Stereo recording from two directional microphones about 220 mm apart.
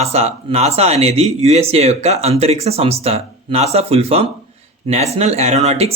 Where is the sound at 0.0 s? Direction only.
30° right (ahead or behind).